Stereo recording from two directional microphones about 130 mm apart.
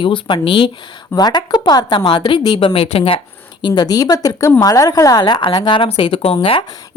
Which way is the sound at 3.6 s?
35° left (ahead or behind).